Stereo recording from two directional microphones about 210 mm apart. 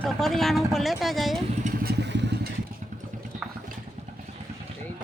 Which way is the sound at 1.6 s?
50° right (ahead or behind).